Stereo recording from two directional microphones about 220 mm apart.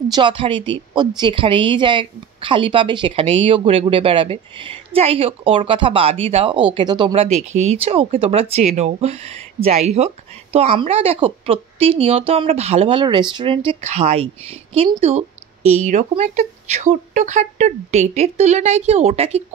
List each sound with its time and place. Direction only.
0.1 s a woman's voice: 20° right (ahead or behind)